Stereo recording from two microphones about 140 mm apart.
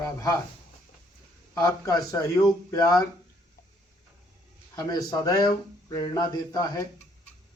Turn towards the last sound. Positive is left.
turn(degrees=25)  # may be behind; listen again after turning